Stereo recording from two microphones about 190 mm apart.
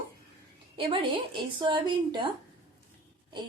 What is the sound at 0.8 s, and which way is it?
A woman's voice, 25° right (ahead or behind).